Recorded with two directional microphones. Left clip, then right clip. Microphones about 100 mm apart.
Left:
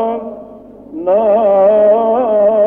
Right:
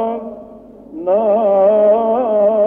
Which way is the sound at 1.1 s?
35° left (ahead or behind).